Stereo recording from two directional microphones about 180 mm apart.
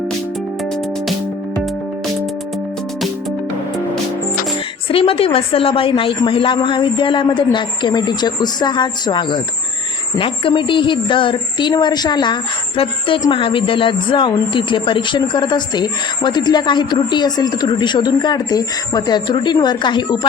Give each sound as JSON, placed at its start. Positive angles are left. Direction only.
{"t": 4.9, "sound": "speech", "side_deg": 30}